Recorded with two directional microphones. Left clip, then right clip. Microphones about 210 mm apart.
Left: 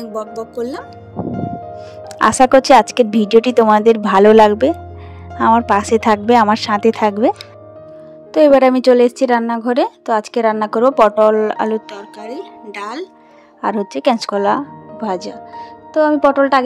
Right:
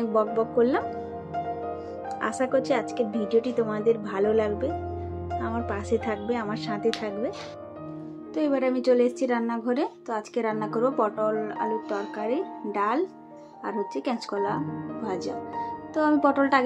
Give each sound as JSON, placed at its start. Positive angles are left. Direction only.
{"t": 0.4, "sound": "speech", "side_deg": 5}
{"t": 2.0, "sound": "speech", "side_deg": 55}